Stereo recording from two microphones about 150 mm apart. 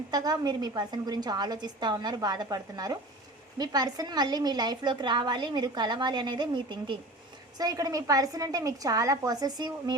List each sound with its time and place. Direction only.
0.1 s a woman's voice: 25° right (ahead or behind)